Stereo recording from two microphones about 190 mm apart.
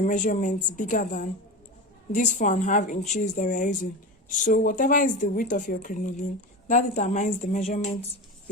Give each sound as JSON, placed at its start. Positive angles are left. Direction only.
{"t": 0.0, "sound": "a woman's voice", "side_deg": 45}